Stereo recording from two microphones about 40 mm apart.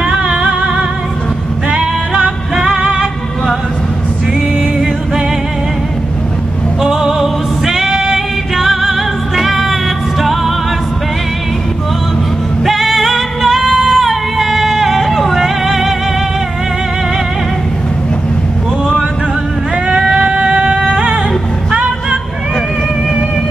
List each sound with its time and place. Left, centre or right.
0.2 s music: right
1.7 s female singing: right
2.5 s music: centre
6.8 s music: centre
12.6 s music: centre
19.9 s a sound: centre
20.8 s music: centre